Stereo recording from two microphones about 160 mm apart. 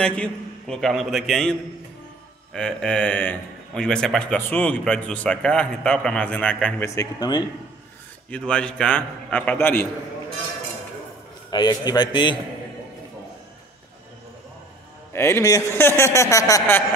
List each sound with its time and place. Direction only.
0.0 s a man's voice: 5° left (ahead or behind)
6.9 s a man's voice: 20° left (ahead or behind)
8.3 s a man's voice: 5° left (ahead or behind)
11.5 s a man's voice: 25° left (ahead or behind)
15.1 s a man's voice: 15° left (ahead or behind)